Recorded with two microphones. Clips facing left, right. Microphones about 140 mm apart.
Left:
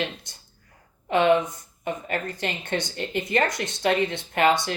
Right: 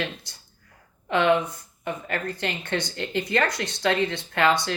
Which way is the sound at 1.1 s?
20° left (ahead or behind).